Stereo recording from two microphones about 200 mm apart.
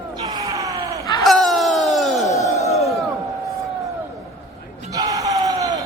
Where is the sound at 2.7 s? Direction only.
Centre (ahead or behind).